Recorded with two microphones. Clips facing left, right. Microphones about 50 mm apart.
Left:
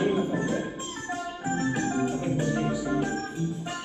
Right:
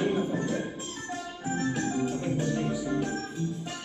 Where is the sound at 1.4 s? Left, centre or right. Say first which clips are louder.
Left 1 dB; left.